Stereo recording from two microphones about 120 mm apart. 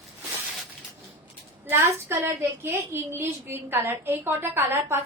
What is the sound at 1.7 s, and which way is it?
A woman's voice, 20° right (ahead or behind).